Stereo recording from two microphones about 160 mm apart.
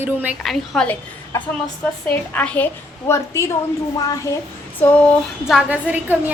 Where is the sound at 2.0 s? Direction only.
10° left (ahead or behind).